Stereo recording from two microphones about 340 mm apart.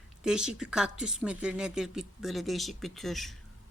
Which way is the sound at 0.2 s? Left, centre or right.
Centre.